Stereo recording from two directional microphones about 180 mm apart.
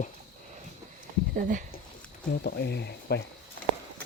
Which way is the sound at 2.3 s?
65° left (ahead or behind).